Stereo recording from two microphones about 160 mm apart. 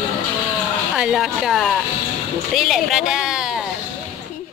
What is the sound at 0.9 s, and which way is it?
A woman's voice, 5° right (ahead or behind).